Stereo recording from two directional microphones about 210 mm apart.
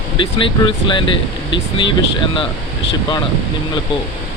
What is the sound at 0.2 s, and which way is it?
Speech, 25° left (ahead or behind).